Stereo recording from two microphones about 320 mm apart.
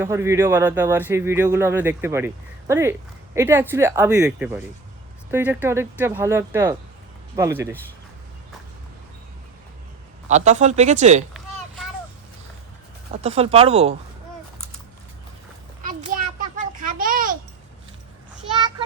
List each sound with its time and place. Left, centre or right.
0.0 s speech: centre
10.2 s speech: right
13.2 s speech: centre
15.9 s a sound: right
18.5 s child singing: centre